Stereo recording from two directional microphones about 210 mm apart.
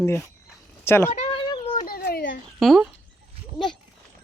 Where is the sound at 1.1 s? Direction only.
25° left (ahead or behind).